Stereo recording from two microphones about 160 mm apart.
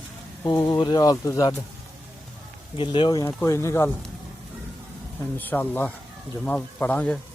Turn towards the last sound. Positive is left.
turn(degrees=10)  # may be behind; listen again after turning